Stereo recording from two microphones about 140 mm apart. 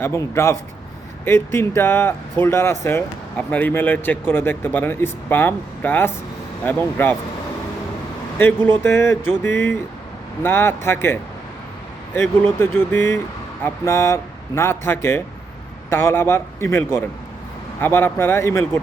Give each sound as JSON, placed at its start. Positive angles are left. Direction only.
{"t": 0.0, "sound": "speech", "side_deg": 20}
{"t": 8.4, "sound": "speech", "side_deg": 15}